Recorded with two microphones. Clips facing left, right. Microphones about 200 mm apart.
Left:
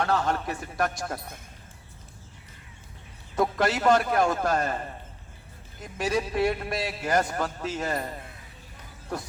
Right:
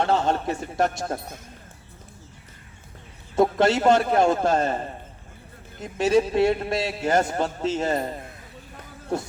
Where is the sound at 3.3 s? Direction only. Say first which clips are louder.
Right 6 dB; 25° right (ahead or behind).